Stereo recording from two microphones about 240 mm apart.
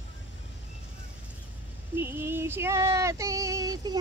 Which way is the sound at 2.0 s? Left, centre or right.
Centre.